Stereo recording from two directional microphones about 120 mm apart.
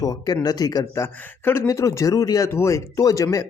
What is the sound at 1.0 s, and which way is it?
Speech, 20° left (ahead or behind).